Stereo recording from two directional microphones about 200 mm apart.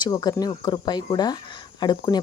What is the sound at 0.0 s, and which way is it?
Speech, 20° left (ahead or behind).